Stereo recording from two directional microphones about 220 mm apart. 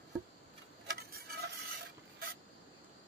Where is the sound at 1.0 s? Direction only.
45° right (ahead or behind).